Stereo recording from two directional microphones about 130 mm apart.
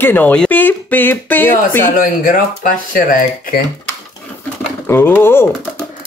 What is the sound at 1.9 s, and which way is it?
Speech, 90° left.